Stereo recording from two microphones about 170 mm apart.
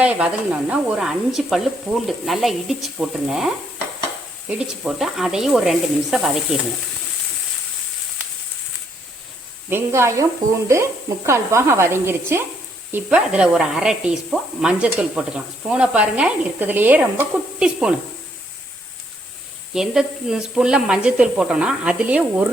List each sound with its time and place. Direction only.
0.0 s speech: 5° right (ahead or behind)
9.6 s speech: 15° right (ahead or behind)
19.7 s speech: 5° right (ahead or behind)